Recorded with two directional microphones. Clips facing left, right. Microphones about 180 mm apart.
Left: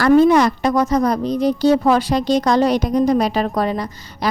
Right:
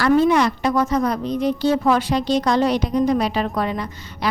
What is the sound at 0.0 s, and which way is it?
A woman's voice, 45° left (ahead or behind).